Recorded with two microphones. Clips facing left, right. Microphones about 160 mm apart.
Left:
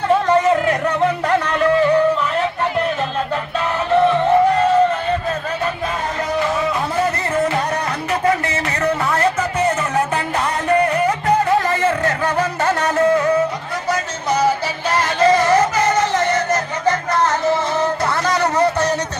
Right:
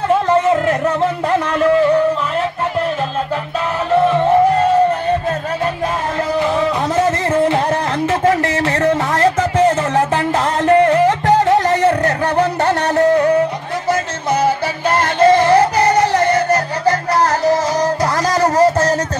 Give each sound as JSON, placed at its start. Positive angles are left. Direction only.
{"t": 8.3, "sound": "a sound", "side_deg": -90}
{"t": 9.9, "sound": "music", "side_deg": -90}
{"t": 11.5, "sound": "music", "side_deg": -75}
{"t": 14.4, "sound": "music", "side_deg": -55}
{"t": 15.4, "sound": "music", "side_deg": -35}